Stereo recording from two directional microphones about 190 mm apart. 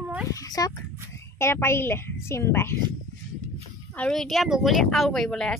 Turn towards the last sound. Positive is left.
turn(degrees=0)  # may be behind; listen again after turning